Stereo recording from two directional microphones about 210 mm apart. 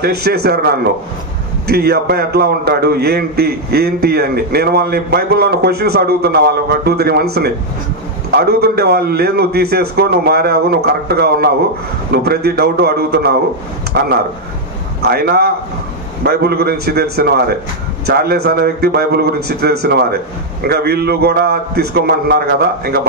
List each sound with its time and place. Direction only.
0.0 s a man's voice: 50° right (ahead or behind)